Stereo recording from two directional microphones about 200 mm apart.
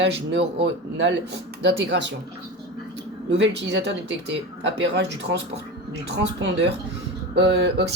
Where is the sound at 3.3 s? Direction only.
60° right (ahead or behind).